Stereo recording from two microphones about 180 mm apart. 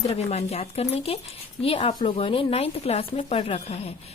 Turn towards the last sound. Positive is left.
turn(degrees=35)  # may be behind; listen again after turning